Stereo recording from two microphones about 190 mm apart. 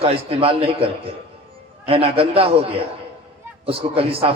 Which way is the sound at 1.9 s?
30° right (ahead or behind).